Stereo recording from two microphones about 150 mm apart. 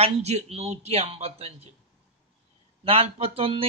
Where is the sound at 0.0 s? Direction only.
45° right (ahead or behind).